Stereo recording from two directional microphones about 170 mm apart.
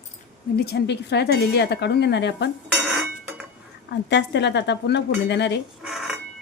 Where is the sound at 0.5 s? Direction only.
70° left (ahead or behind); by 2.5 s 85° left.